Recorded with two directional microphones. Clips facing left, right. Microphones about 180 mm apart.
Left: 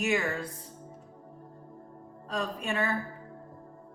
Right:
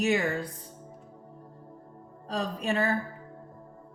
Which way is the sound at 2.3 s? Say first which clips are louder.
Right 3 dB; 35° right (ahead or behind).